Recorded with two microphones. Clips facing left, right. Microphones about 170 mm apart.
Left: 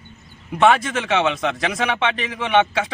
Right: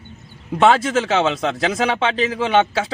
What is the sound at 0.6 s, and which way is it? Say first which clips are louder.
A man's voice: right 2 dB; 25° right (ahead or behind).